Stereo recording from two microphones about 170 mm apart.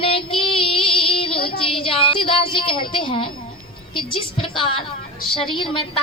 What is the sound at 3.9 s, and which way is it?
A woman's voice, 30° left (ahead or behind).